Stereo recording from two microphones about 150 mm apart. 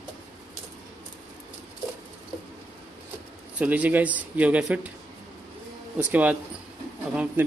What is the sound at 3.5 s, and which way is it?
Speech, 10° right (ahead or behind).